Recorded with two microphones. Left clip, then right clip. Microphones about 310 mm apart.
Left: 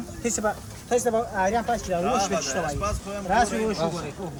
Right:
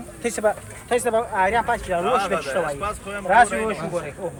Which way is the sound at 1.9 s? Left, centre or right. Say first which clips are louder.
Right 2 dB; right.